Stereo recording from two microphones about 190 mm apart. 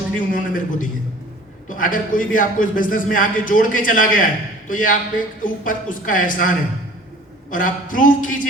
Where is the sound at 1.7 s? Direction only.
45° left (ahead or behind).